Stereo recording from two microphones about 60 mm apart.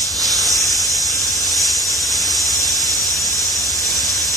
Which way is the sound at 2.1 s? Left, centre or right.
Centre.